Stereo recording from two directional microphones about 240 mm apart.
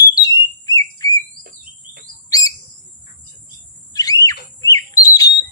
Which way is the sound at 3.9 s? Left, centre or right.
Centre.